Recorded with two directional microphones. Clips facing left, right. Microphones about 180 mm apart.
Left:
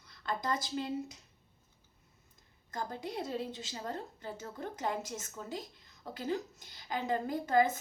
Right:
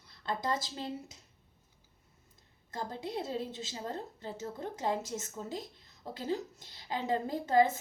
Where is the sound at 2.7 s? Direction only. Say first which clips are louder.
Right 1 dB; 25° right (ahead or behind).